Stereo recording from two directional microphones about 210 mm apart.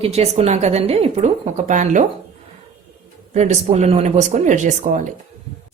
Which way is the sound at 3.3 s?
30° right (ahead or behind).